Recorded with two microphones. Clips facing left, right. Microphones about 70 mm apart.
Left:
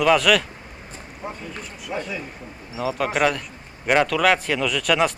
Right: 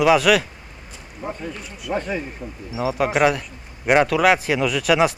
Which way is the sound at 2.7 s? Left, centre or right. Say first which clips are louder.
Right 3 dB; centre.